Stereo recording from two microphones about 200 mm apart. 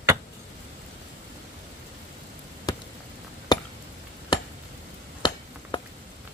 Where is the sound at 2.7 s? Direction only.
20° left (ahead or behind).